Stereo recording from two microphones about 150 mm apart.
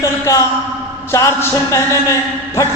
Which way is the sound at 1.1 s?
20° left (ahead or behind).